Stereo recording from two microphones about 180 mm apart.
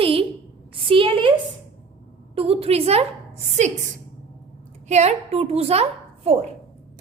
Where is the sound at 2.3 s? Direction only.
30° right (ahead or behind).